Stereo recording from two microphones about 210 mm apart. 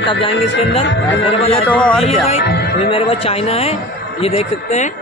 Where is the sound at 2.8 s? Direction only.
25° left (ahead or behind).